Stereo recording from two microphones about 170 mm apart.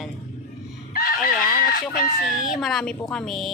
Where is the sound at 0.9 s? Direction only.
55° left (ahead or behind).